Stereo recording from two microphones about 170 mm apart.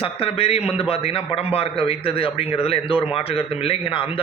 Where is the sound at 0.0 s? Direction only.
35° left (ahead or behind).